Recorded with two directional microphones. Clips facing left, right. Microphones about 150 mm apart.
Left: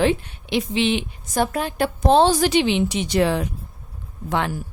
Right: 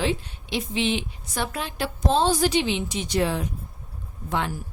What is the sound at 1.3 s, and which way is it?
A woman's voice, 45° left (ahead or behind).